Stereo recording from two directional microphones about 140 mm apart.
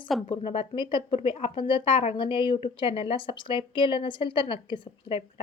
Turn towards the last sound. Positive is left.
turn(degrees=40)  # may be behind; listen again after turning